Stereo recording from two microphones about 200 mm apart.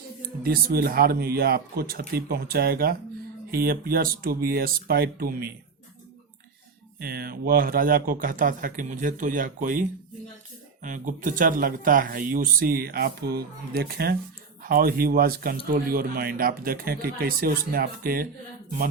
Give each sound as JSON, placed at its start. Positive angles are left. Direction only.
{"t": 0.4, "sound": "a man's voice", "side_deg": -50}
{"t": 7.0, "sound": "a man's voice", "side_deg": -50}
{"t": 10.8, "sound": "a man's voice", "side_deg": -40}